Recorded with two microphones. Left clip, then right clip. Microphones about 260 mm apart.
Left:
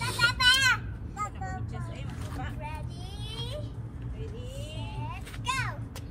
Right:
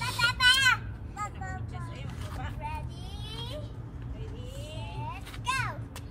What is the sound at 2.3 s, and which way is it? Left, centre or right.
Vehicle, centre.